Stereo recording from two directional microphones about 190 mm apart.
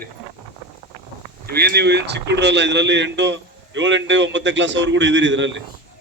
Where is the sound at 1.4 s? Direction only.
55° right (ahead or behind).